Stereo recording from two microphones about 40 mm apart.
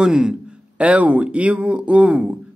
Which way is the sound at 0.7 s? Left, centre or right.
Right.